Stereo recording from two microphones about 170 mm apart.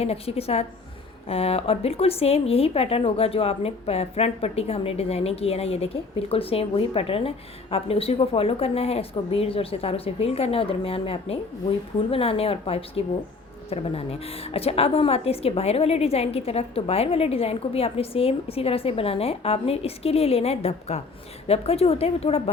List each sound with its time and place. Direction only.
0.0 s speech: 35° left (ahead or behind)